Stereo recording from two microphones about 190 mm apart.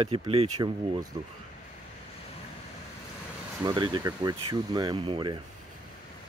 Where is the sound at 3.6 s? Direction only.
25° right (ahead or behind).